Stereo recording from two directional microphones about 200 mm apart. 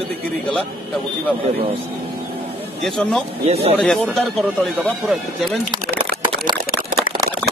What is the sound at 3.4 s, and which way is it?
Speech, 30° right (ahead or behind).